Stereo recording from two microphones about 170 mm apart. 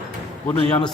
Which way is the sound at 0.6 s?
35° left (ahead or behind).